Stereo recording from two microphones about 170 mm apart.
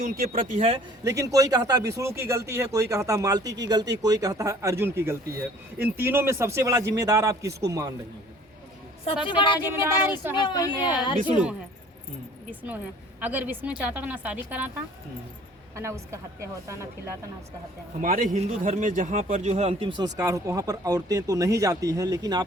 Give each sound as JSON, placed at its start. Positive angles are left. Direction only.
{"t": 0.0, "sound": "speech", "side_deg": -60}
{"t": 1.0, "sound": "speech", "side_deg": -20}
{"t": 9.2, "sound": "speech", "side_deg": 30}
{"t": 9.8, "sound": "speech", "side_deg": -10}
{"t": 10.4, "sound": "speech", "side_deg": 25}
{"t": 12.5, "sound": "speech", "side_deg": -10}
{"t": 15.7, "sound": "speech", "side_deg": -15}
{"t": 18.0, "sound": "speech", "side_deg": -50}